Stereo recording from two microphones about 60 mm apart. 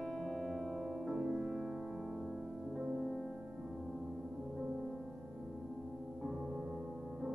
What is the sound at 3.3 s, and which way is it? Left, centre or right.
Music, centre.